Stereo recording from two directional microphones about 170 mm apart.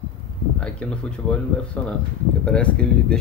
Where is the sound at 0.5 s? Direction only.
5° left (ahead or behind).